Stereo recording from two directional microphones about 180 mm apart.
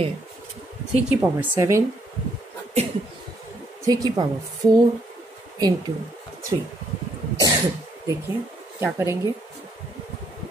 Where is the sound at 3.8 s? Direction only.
20° right (ahead or behind).